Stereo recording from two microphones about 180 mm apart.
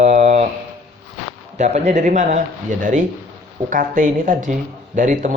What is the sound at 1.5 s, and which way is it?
Speech, 40° right (ahead or behind).